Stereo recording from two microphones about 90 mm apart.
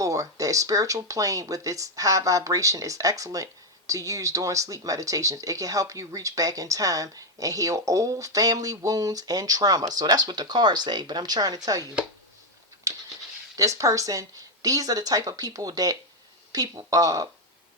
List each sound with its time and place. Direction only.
0.0 s speech: 40° right (ahead or behind)
13.6 s speech: 35° right (ahead or behind)